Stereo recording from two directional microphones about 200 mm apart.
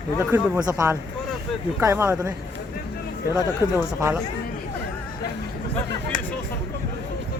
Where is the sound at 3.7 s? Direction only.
15° right (ahead or behind).